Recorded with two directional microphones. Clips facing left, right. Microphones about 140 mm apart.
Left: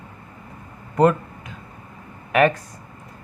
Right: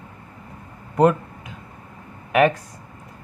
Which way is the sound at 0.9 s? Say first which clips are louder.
Even; 5° right (ahead or behind).